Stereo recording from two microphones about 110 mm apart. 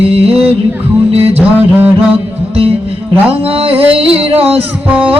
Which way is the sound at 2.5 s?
60° right (ahead or behind).